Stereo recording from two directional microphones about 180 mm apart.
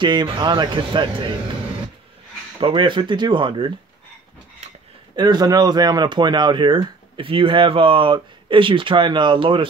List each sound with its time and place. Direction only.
0.0 s speech: 25° right (ahead or behind)
2.6 s speech: 25° right (ahead or behind)
5.1 s speech: 25° right (ahead or behind)